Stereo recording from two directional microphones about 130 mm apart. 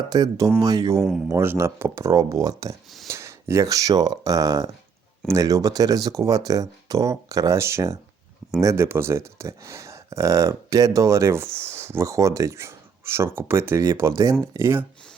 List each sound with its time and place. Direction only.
0.1 s speech: 30° right (ahead or behind)